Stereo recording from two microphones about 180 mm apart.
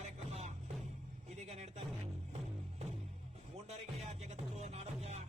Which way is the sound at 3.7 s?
40° right (ahead or behind).